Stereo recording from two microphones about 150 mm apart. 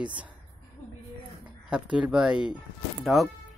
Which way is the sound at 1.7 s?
5° right (ahead or behind).